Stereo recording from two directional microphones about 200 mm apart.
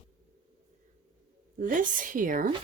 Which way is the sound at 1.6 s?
40° right (ahead or behind).